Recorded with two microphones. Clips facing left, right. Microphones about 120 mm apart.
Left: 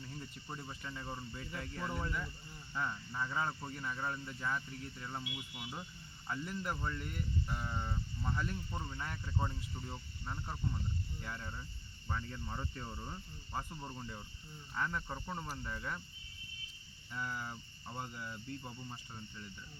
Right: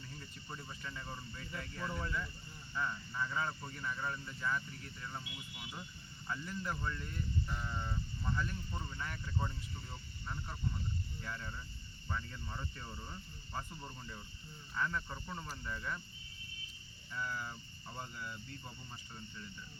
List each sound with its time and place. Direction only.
0.4 s speech: 20° left (ahead or behind)
17.2 s speech: 20° left (ahead or behind)